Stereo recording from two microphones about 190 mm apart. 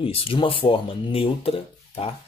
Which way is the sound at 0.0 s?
30° left (ahead or behind).